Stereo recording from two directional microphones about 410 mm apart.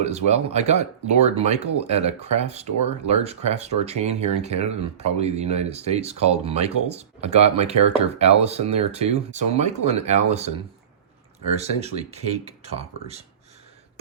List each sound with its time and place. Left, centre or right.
0.0 s speech: centre
11.5 s speech: centre